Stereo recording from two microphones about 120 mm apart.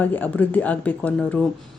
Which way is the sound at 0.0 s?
15° left (ahead or behind).